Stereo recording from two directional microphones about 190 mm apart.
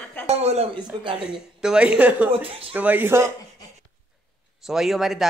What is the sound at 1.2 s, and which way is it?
A man's voice, 5° right (ahead or behind).